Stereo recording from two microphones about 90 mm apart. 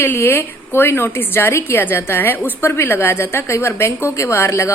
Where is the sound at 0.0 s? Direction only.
25° left (ahead or behind).